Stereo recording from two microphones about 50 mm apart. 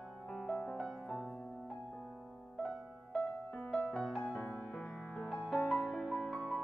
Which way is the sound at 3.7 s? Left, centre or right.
Left.